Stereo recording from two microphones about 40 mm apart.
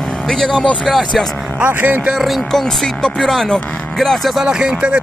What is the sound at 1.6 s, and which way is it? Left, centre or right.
Speech, right.